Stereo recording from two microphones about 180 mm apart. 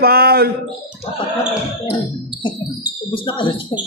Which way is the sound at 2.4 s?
25° left (ahead or behind).